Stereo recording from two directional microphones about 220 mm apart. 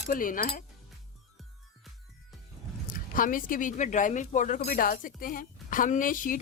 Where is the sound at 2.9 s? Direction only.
40° left (ahead or behind).